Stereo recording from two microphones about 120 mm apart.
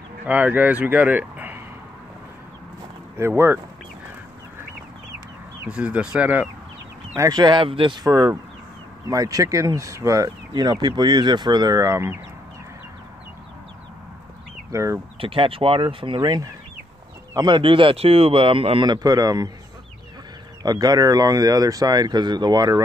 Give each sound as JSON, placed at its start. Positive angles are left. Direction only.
{"t": 0.3, "sound": "speech", "side_deg": -15}
{"t": 3.2, "sound": "speech", "side_deg": -20}
{"t": 5.7, "sound": "speech", "side_deg": -10}
{"t": 7.2, "sound": "speech", "side_deg": -35}
{"t": 14.7, "sound": "speech", "side_deg": -25}
{"t": 15.1, "sound": "speech", "side_deg": -45}
{"t": 18.9, "sound": "speech", "side_deg": -30}
{"t": 20.6, "sound": "speech", "side_deg": -30}